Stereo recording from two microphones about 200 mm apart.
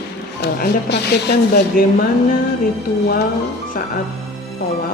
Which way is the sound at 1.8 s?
45° left (ahead or behind).